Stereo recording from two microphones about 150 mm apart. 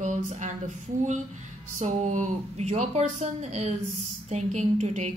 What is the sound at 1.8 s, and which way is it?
A woman's voice, 50° right (ahead or behind).